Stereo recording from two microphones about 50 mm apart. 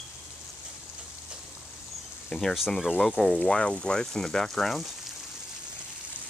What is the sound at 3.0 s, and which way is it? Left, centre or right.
Speech, centre.